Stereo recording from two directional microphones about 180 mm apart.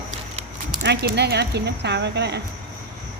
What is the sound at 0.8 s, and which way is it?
Speech, 65° right (ahead or behind).